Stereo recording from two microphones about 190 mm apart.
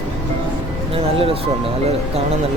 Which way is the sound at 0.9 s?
30° right (ahead or behind).